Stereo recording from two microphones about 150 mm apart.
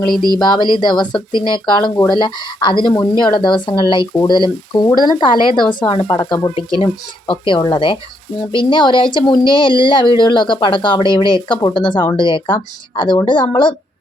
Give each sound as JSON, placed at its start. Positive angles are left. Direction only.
{"t": 0.3, "sound": "speech", "side_deg": 30}